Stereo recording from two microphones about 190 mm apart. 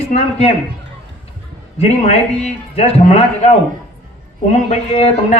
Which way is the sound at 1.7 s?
35° left (ahead or behind).